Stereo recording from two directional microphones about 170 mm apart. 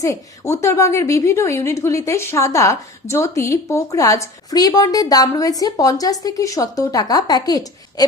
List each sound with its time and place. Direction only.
0.0 s a woman's voice: 15° left (ahead or behind)